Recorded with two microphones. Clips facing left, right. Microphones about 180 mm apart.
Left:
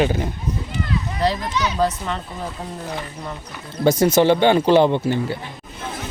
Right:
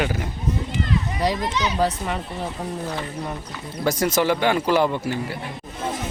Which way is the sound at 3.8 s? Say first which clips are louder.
Left 6 dB; 25° left (ahead or behind).